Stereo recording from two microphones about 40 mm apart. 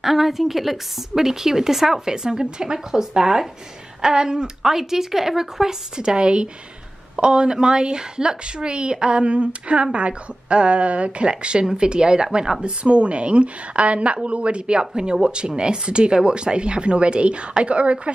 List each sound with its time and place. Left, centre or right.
0.0 s a woman's voice: centre; by 18.1 s right